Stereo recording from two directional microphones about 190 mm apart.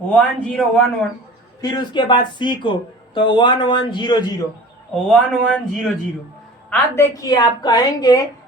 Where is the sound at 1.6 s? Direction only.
25° left (ahead or behind).